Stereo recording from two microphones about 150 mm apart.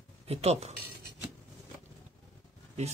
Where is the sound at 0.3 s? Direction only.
45° right (ahead or behind).